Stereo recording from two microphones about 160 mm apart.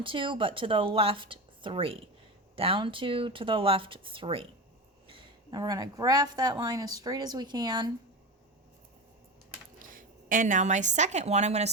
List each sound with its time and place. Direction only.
0.0 s a woman's voice: 30° right (ahead or behind)
9.7 s a woman's voice: 60° right (ahead or behind)